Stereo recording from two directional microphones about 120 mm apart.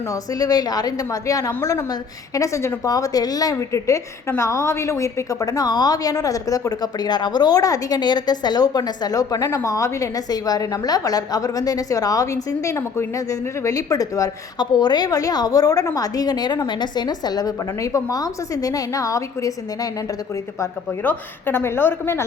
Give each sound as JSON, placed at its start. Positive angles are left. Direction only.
{"t": 0.1, "sound": "a woman's voice", "side_deg": 30}
{"t": 20.6, "sound": "a woman's voice", "side_deg": 15}